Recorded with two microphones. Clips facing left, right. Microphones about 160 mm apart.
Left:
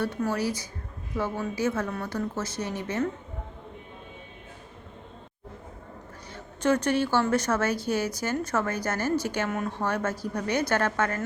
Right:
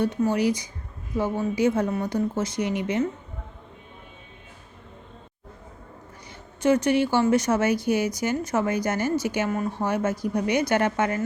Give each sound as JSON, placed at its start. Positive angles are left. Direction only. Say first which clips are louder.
{"t": 0.0, "sound": "speech", "louder": "right 5 dB", "side_deg": -15}
{"t": 6.3, "sound": "speech", "louder": "right 3 dB", "side_deg": -10}